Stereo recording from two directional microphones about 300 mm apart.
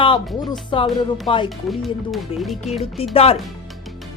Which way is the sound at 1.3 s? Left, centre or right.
Centre.